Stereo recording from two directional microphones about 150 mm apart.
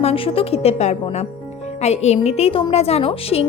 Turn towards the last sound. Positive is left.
turn(degrees=40)  # may be behind; listen again after turning